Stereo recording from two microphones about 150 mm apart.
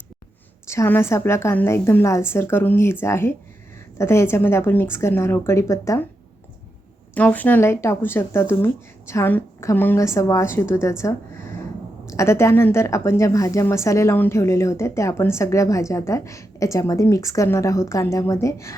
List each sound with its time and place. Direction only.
0.7 s a woman's voice: 15° left (ahead or behind)
7.1 s a woman's voice: 10° left (ahead or behind)